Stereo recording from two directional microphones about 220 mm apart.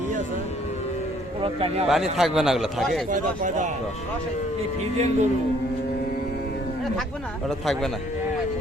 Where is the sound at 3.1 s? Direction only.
35° right (ahead or behind).